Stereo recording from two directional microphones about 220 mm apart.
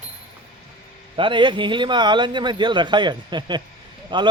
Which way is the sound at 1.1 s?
20° right (ahead or behind).